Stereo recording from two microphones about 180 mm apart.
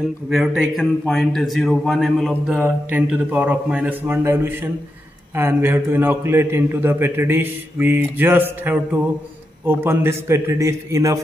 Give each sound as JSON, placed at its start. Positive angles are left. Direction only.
{"t": 0.3, "sound": "a man's voice", "side_deg": 0}